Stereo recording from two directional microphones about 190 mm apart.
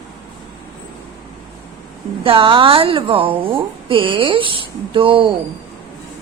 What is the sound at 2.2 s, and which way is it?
A woman's voice, 25° right (ahead or behind).